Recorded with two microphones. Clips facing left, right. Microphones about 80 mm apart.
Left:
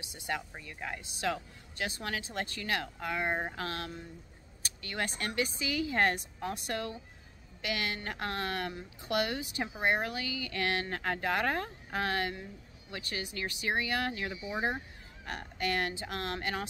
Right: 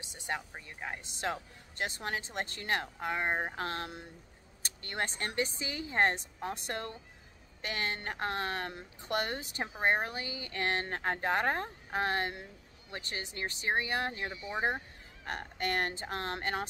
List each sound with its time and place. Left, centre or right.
0.3 s speech: right
9.1 s speech: right
9.8 s speech: right
15.2 s speech: right